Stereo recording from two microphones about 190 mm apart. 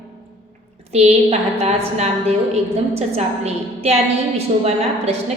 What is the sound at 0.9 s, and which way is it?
A woman's voice, 35° right (ahead or behind).